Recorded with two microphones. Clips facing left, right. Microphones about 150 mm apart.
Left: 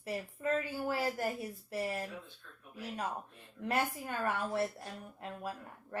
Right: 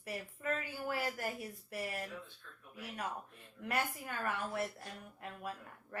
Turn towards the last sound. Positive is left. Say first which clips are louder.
# left 4 dB
turn(degrees=30)  # may be behind; listen again after turning